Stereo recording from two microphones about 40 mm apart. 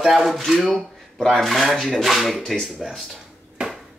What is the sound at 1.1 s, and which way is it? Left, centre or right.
Speech, centre.